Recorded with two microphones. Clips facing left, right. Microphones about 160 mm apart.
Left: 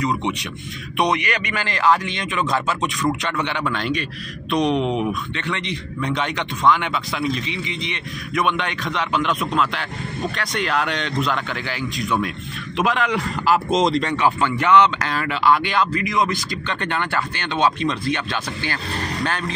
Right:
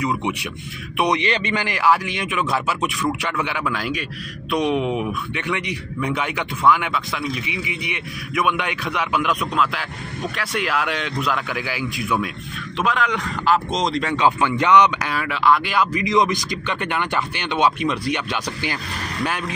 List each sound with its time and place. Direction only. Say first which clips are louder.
0.2 s a man's voice: even; 10° right (ahead or behind)
1.1 s speech: right 2 dB; 25° right (ahead or behind)
1.6 s a man's voice: left 2 dB; 10° right (ahead or behind)
12.7 s a man's voice: left 1 dB; 5° left (ahead or behind)
14.1 s a man's voice: right 1 dB; 15° right (ahead or behind)
16.0 s a man's voice: right 3 dB; 20° right (ahead or behind)